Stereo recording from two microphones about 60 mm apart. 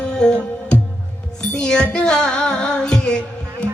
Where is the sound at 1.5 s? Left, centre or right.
Centre.